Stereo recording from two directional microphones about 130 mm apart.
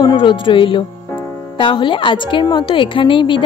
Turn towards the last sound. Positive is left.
turn(degrees=40)  # may be behind; listen again after turning